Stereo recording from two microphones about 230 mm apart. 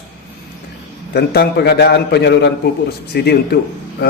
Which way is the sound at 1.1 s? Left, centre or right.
Left.